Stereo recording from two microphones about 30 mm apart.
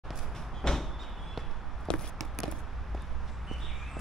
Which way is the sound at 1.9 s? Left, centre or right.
Left.